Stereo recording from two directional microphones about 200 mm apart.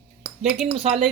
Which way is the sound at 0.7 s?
30° right (ahead or behind).